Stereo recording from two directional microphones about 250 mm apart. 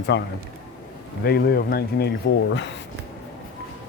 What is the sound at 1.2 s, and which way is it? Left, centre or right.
Speech, left.